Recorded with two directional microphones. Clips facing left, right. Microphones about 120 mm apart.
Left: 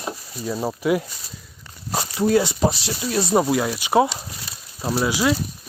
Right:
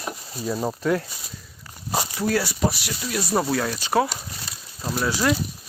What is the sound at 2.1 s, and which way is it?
Speech, 20° left (ahead or behind).